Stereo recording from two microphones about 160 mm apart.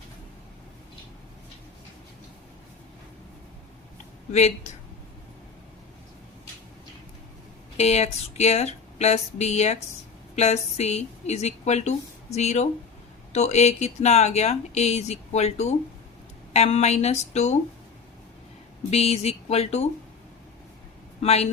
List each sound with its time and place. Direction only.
4.3 s speech: 45° left (ahead or behind)
7.8 s speech: 45° left (ahead or behind)
18.9 s speech: 40° left (ahead or behind)
21.2 s speech: 40° left (ahead or behind)